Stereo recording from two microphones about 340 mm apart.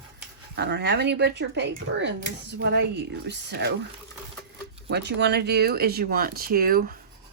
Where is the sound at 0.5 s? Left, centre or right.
Right.